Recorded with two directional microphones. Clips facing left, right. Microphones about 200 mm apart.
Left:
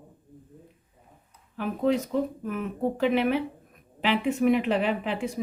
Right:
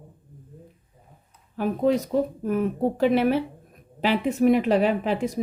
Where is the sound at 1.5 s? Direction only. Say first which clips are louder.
Right 3 dB; 40° right (ahead or behind).